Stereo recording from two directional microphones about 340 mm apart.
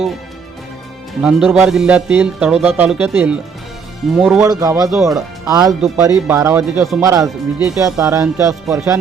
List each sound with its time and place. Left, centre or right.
1.2 s speech: centre